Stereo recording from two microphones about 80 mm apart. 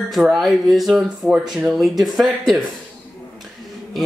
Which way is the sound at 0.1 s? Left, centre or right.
Centre.